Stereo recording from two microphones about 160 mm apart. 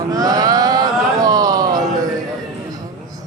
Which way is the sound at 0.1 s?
25° right (ahead or behind).